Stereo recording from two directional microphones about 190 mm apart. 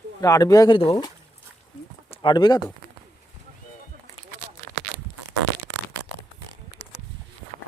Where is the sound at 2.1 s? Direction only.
25° left (ahead or behind).